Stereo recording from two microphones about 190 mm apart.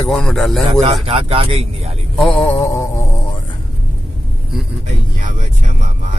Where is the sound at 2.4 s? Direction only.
15° left (ahead or behind).